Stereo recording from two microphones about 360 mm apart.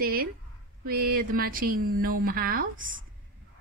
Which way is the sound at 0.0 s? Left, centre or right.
Right.